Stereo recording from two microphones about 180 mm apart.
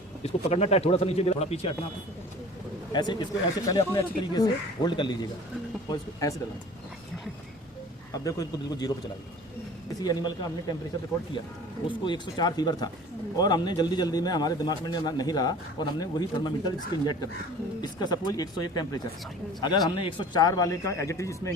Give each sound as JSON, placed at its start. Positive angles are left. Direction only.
{"t": 0.2, "sound": "speech", "side_deg": 35}
{"t": 2.9, "sound": "a man's voice", "side_deg": 25}
{"t": 8.1, "sound": "a man's voice", "side_deg": 20}
{"t": 10.0, "sound": "a man's voice", "side_deg": 25}
{"t": 11.9, "sound": "a man's voice", "side_deg": 25}